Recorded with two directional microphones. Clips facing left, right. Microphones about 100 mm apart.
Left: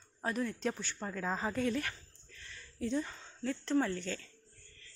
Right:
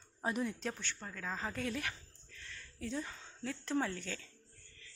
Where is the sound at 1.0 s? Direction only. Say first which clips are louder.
Left 8 dB; 35° left (ahead or behind).